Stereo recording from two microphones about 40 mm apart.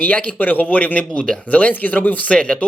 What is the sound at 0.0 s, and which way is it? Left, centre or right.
Speech, left.